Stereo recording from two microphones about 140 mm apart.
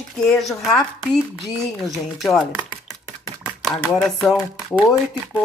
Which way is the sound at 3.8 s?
5° left (ahead or behind).